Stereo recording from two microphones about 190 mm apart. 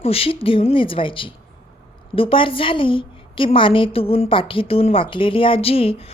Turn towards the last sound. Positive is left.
turn(degrees=30)  # may be behind; listen again after turning